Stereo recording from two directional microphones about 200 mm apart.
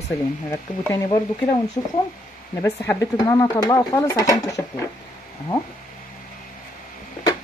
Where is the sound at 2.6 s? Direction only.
15° left (ahead or behind).